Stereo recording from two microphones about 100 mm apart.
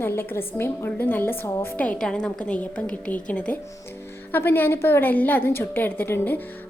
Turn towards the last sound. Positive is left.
turn(degrees=20)  # may be behind; listen again after turning